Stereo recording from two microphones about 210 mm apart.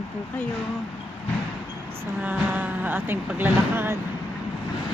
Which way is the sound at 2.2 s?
5° right (ahead or behind).